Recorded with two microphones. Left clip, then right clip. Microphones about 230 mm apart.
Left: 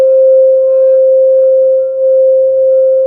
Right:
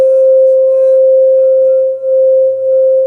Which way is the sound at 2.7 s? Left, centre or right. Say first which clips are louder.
Left 1 dB; right.